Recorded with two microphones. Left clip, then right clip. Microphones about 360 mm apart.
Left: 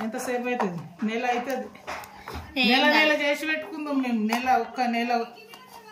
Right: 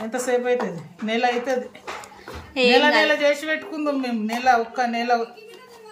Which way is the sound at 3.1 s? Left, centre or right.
Centre.